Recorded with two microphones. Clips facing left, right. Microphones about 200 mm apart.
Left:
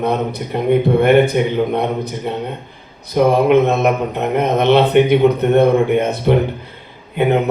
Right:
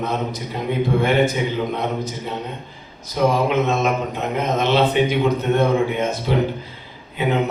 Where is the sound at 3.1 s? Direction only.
60° left (ahead or behind).